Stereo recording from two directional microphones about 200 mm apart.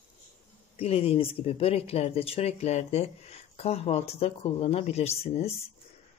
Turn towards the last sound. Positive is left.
turn(degrees=30)  # may be behind; listen again after turning